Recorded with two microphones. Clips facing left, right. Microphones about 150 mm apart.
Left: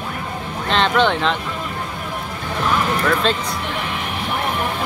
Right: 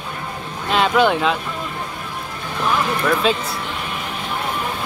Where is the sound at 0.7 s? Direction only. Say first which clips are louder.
Right 1 dB; 10° right (ahead or behind).